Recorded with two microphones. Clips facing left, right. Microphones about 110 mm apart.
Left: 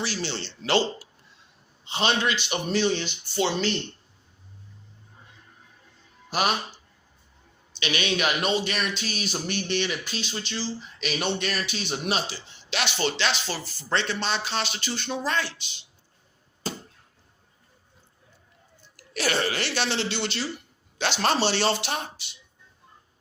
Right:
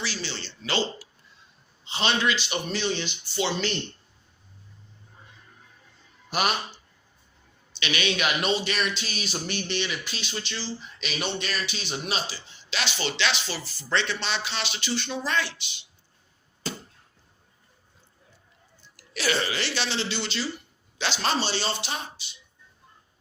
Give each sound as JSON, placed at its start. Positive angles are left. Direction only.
{"t": 0.0, "sound": "speech", "side_deg": 55}
{"t": 1.9, "sound": "a man's voice", "side_deg": 45}
{"t": 7.8, "sound": "a man's voice", "side_deg": 40}
{"t": 11.0, "sound": "a man's voice", "side_deg": 55}
{"t": 16.7, "sound": "a sound", "side_deg": 45}
{"t": 18.8, "sound": "speech", "side_deg": 50}